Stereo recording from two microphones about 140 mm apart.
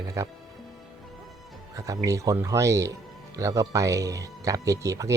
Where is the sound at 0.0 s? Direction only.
25° right (ahead or behind).